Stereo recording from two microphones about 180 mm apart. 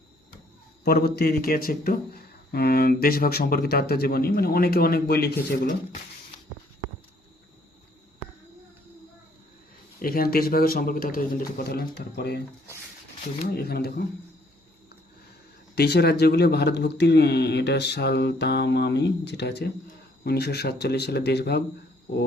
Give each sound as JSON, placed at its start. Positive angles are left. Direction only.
{"t": 0.9, "sound": "speech", "side_deg": 60}
{"t": 10.0, "sound": "speech", "side_deg": 55}
{"t": 13.6, "sound": "speech", "side_deg": 60}
{"t": 15.7, "sound": "speech", "side_deg": 65}